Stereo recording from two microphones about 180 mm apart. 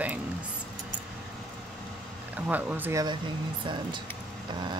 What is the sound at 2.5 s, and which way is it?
Speech, 10° right (ahead or behind).